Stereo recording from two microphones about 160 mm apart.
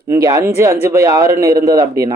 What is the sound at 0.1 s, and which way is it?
Speech, 20° right (ahead or behind).